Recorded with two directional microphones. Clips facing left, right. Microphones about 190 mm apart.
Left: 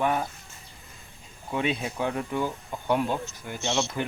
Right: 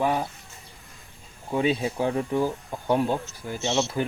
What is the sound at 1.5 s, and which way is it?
Speech, 35° right (ahead or behind).